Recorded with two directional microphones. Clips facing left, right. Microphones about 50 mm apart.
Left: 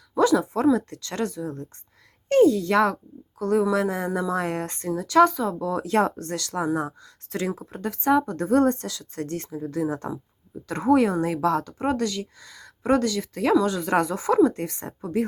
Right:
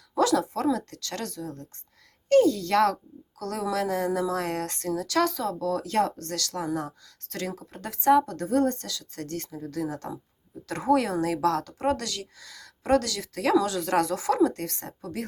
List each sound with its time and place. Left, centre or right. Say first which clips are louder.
0.1 s a woman's voice: left 3 dB; centre
7.8 s speech: right 1 dB; centre
8.4 s a woman's voice: left 4 dB; left
10.7 s speech: left 4 dB; centre